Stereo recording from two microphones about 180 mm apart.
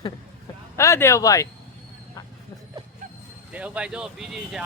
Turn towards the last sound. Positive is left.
turn(degrees=-5)  # may be behind; listen again after turning